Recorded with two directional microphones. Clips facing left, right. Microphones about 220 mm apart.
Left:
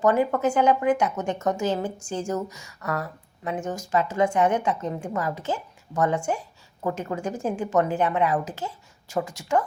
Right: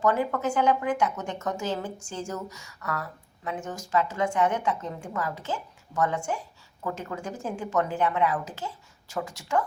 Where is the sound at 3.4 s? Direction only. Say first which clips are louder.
Left 5 dB; 20° left (ahead or behind).